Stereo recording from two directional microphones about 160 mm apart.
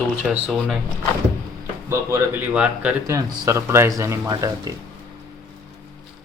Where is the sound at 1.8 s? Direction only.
20° right (ahead or behind).